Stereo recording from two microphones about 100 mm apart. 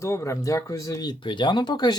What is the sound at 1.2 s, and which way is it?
Speech, 50° left (ahead or behind).